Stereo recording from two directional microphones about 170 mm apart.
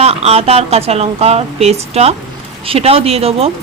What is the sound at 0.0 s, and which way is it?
Speech, 35° right (ahead or behind).